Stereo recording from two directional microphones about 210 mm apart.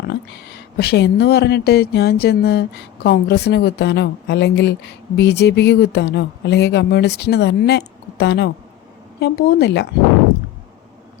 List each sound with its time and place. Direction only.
0.8 s speech: 50° left (ahead or behind)